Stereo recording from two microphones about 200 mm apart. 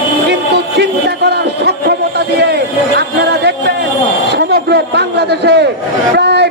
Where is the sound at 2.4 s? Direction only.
55° right (ahead or behind).